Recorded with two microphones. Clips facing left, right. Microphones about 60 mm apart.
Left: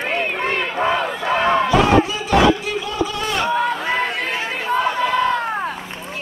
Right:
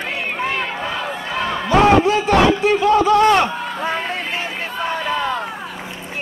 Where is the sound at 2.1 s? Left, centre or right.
Right.